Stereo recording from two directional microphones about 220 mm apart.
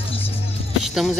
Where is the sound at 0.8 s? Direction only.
Centre (ahead or behind).